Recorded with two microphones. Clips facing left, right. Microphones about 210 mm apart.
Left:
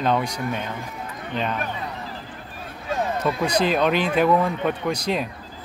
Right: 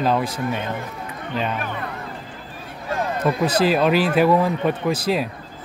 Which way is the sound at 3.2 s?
5° right (ahead or behind).